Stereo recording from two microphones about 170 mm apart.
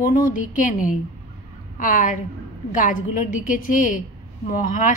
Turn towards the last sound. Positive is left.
turn(degrees=50)  # may be behind; listen again after turning